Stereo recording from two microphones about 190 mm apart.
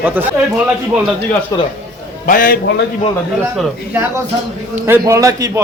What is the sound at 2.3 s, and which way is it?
Speech, 45° left (ahead or behind).